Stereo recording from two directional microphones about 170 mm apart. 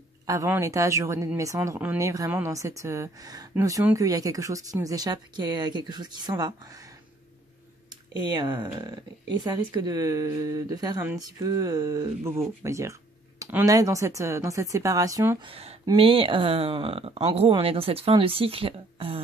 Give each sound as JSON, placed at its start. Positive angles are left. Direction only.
{"t": 0.3, "sound": "a woman's voice", "side_deg": -20}
{"t": 7.9, "sound": "speech", "side_deg": -25}
{"t": 15.4, "sound": "speech", "side_deg": -35}